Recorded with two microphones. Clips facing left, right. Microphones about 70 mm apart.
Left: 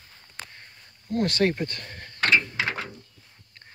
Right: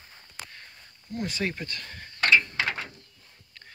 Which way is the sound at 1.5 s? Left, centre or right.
Left.